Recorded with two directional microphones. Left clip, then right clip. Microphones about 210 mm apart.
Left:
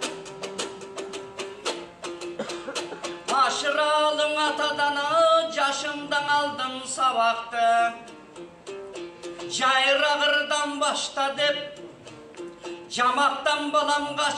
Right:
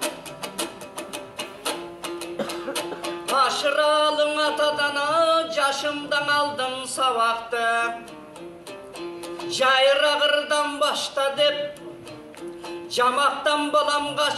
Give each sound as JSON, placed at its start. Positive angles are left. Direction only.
{"t": 0.0, "sound": "music", "side_deg": -45}
{"t": 9.4, "sound": "a man's voice", "side_deg": -50}
{"t": 12.9, "sound": "a man's voice", "side_deg": -50}